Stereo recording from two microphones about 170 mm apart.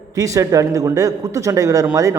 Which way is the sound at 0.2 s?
20° right (ahead or behind).